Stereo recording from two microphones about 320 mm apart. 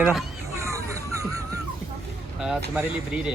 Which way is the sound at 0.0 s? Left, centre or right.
Centre.